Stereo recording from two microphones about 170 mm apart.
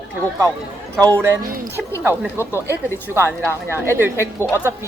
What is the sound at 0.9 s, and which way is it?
Speech, 5° left (ahead or behind).